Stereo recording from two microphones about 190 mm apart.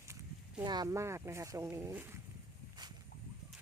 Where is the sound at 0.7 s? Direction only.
20° right (ahead or behind).